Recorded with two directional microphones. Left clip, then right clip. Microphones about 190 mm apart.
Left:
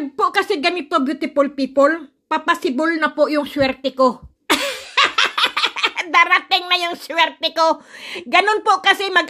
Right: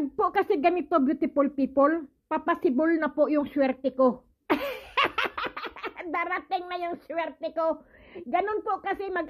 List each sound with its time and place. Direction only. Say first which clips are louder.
0.2 s a child's voice: left 7 dB; centre (ahead or behind); by 9.2 s 15° left (ahead or behind)